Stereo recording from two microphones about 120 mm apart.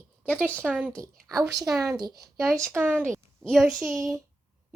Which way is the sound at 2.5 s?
25° right (ahead or behind).